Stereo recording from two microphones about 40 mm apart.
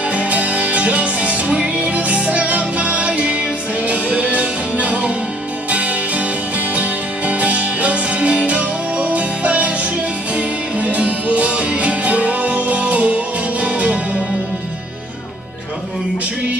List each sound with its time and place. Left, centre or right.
0.1 s music: right